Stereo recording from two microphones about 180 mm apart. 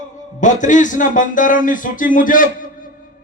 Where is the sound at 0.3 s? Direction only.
45° left (ahead or behind).